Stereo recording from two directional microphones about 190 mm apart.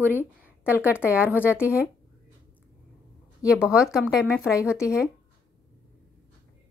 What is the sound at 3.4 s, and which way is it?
Speech, 5° right (ahead or behind).